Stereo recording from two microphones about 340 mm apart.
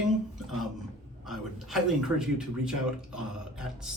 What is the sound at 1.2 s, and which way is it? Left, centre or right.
A man's voice, centre.